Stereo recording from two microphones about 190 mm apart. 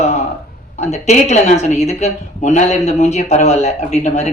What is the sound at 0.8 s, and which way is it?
Speech, 35° left (ahead or behind).